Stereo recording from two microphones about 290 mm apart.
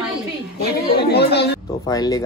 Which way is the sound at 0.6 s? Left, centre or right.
Left.